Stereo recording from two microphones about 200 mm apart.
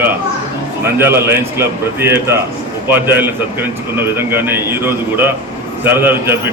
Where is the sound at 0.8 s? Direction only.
10° right (ahead or behind).